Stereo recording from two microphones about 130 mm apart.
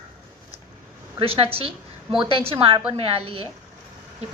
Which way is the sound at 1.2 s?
45° right (ahead or behind).